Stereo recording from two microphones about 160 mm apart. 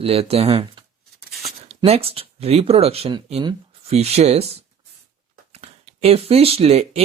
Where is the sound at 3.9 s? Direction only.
40° right (ahead or behind).